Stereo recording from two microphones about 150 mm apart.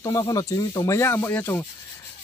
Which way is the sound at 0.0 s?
25° left (ahead or behind).